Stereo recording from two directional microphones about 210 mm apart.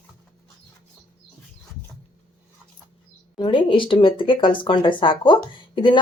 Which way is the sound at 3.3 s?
20° left (ahead or behind).